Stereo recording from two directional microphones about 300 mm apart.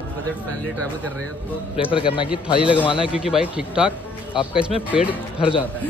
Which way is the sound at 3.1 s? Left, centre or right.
Centre.